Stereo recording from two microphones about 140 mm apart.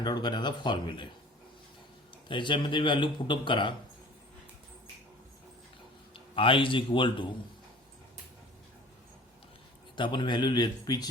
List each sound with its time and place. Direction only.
0.0 s speech: 30° left (ahead or behind)
2.2 s speech: 35° left (ahead or behind)
6.1 s a man's voice: 40° left (ahead or behind)
9.9 s speech: 35° left (ahead or behind)